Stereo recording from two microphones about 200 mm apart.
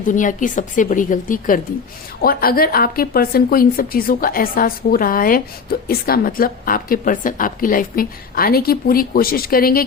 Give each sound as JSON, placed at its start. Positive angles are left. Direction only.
{"t": 0.0, "sound": "a woman's voice", "side_deg": 40}